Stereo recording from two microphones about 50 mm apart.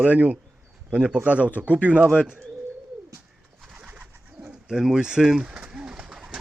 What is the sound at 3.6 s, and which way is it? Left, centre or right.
Bird, centre.